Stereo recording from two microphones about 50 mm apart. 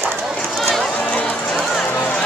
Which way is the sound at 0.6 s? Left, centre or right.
Centre.